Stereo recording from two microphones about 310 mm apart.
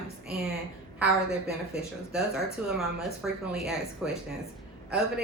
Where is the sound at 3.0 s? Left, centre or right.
Centre.